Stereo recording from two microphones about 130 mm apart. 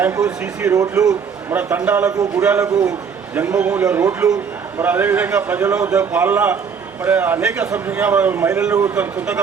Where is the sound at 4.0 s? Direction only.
25° right (ahead or behind).